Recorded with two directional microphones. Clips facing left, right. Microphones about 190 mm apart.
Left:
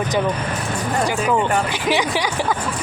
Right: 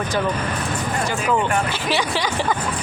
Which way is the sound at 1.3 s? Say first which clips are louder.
Left 1 dB; 15° left (ahead or behind).